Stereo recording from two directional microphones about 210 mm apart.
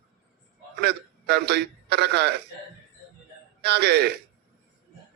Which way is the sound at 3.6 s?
50° right (ahead or behind).